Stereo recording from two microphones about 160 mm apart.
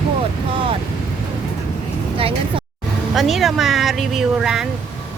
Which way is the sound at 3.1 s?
Centre (ahead or behind).